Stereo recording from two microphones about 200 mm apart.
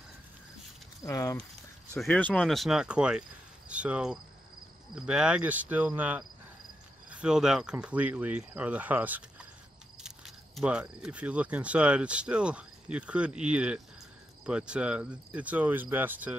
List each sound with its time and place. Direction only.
1.0 s speech: 15° left (ahead or behind); by 16.3 s 10° right (ahead or behind)